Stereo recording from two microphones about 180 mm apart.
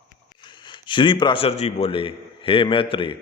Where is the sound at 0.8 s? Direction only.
25° left (ahead or behind).